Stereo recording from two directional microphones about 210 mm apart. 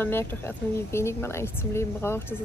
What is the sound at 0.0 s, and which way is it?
Speech, 10° left (ahead or behind).